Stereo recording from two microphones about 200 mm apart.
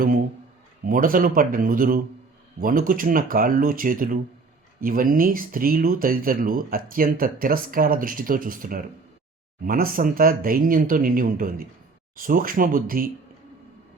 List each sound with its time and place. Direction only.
0.9 s speech: 45° right (ahead or behind)